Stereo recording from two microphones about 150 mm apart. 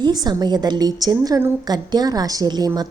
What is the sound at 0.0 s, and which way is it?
A woman's voice, 25° right (ahead or behind).